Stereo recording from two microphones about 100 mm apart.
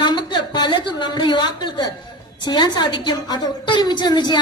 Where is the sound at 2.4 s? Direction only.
45° left (ahead or behind).